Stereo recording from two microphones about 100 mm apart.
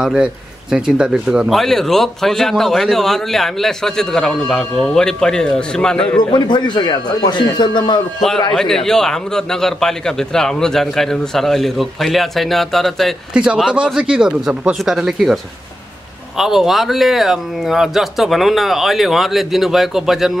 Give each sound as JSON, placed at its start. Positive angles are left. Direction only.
{"t": 0.0, "sound": "speech", "side_deg": -10}
{"t": 6.1, "sound": "speech", "side_deg": 50}
{"t": 8.5, "sound": "speech", "side_deg": 5}
{"t": 13.3, "sound": "speech", "side_deg": -10}